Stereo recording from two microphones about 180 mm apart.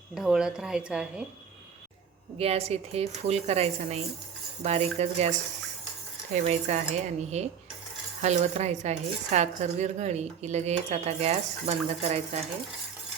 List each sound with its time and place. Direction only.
0.1 s a woman's voice: centre (ahead or behind)
2.4 s speech: 35° right (ahead or behind)